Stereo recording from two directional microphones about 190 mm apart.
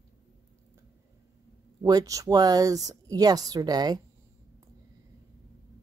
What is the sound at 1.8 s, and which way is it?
Speech, 20° right (ahead or behind).